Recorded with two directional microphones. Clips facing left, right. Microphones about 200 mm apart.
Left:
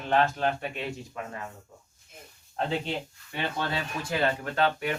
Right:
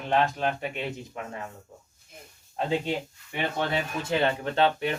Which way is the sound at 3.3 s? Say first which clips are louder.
Right 3 dB; 20° right (ahead or behind).